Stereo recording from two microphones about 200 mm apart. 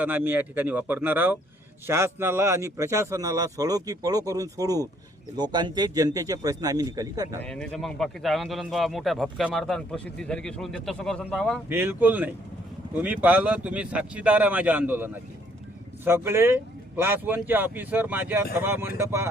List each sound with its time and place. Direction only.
0.0 s a man's voice: 10° right (ahead or behind)
7.4 s speech: 5° left (ahead or behind)
11.7 s a man's voice: 10° right (ahead or behind)